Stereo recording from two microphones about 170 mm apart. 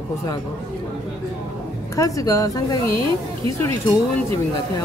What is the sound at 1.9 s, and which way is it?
Speech, 20° left (ahead or behind).